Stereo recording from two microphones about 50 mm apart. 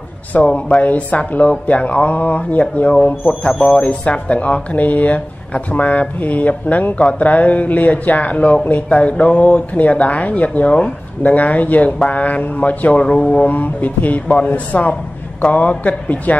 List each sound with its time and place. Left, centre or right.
0.3 s speech: left
13.5 s speech: left